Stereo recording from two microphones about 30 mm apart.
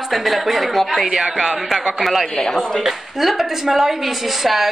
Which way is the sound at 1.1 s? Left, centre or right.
Right.